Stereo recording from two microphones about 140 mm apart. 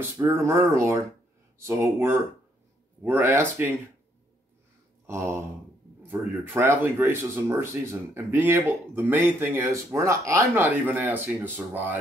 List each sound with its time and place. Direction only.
0.0 s speech: 20° right (ahead or behind)
5.0 s speech: 20° right (ahead or behind)